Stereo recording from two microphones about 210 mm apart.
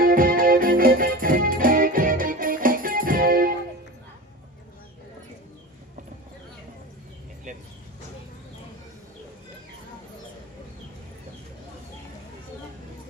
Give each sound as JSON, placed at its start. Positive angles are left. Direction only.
{"t": 0.0, "sound": "music", "side_deg": -45}
{"t": 7.5, "sound": "vehicle", "side_deg": -35}